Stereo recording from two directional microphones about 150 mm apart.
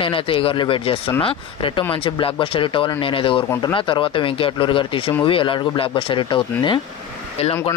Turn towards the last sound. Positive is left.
turn(degrees=35)  # may be behind; listen again after turning